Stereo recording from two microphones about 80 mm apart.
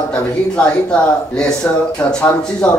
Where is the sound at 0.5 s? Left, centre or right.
Centre.